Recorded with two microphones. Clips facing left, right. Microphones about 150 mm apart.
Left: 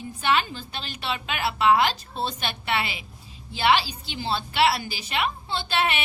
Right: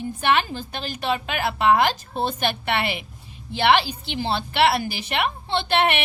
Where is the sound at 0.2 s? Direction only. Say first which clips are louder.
Right 2 dB; 55° right (ahead or behind).